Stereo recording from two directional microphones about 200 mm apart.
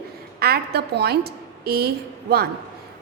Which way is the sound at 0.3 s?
50° right (ahead or behind).